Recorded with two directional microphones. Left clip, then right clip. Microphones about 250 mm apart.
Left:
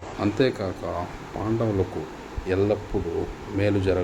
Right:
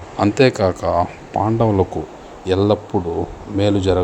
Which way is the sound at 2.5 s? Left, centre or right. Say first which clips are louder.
Right 7 dB; right.